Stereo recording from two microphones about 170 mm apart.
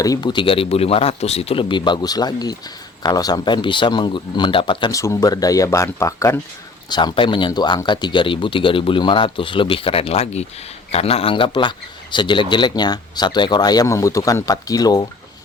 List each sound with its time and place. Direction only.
0.0 s speech: 25° left (ahead or behind)
6.9 s a man's voice: 25° left (ahead or behind)